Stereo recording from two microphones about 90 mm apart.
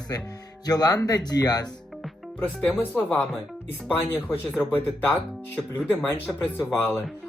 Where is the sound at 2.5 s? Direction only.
5° left (ahead or behind).